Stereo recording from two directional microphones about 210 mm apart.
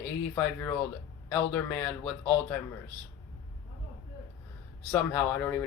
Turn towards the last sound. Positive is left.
turn(degrees=10)  # may be behind; listen again after turning